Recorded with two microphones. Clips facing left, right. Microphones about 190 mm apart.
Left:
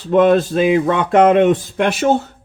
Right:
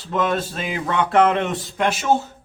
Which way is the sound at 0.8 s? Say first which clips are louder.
Left 5 dB; 45° left (ahead or behind).